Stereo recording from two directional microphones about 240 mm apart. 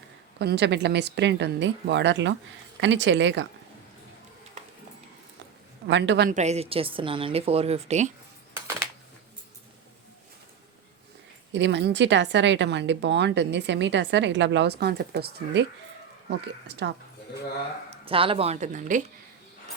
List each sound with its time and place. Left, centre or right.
0.3 s speech: right
5.9 s speech: right
6.3 s a woman's voice: right
11.5 s speech: right
16.6 s speech: right
18.0 s a woman's voice: right